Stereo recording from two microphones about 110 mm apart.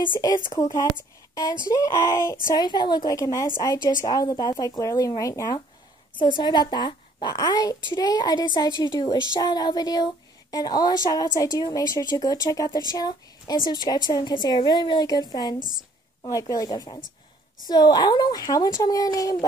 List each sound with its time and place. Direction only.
0.0 s a woman's voice: 40° left (ahead or behind)
2.5 s a woman's voice: 40° left (ahead or behind)
6.1 s a woman's voice: 45° left (ahead or behind)